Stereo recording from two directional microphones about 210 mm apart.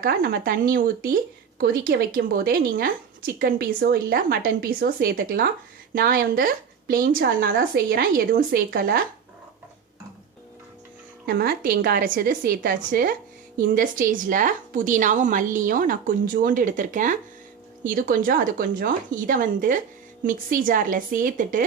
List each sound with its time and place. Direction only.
0.0 s speech: 45° right (ahead or behind)
11.3 s a woman's voice: 45° right (ahead or behind)